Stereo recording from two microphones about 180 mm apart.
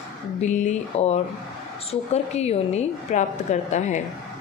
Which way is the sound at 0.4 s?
40° left (ahead or behind).